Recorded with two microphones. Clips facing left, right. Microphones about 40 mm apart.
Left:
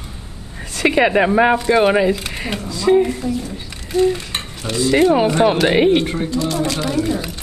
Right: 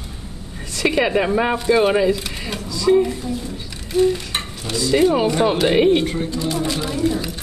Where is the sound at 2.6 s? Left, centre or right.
Left.